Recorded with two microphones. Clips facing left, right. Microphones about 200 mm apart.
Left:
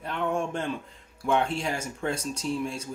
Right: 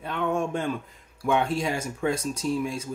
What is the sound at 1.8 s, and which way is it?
Speech, 30° left (ahead or behind).